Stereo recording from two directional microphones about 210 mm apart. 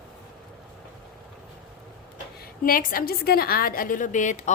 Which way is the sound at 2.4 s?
40° left (ahead or behind).